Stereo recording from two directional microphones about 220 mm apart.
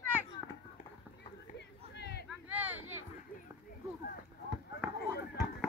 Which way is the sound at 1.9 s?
50° left (ahead or behind).